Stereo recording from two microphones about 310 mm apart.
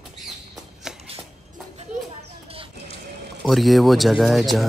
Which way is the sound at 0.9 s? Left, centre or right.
Centre.